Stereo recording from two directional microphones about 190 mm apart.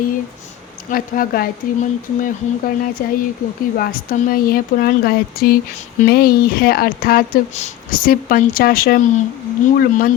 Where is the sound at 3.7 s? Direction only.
50° left (ahead or behind).